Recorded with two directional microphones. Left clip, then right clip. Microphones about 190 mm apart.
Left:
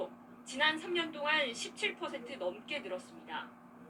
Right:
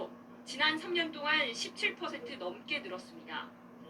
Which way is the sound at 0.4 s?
15° right (ahead or behind).